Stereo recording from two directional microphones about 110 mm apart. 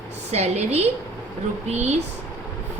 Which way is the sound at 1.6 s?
90° right.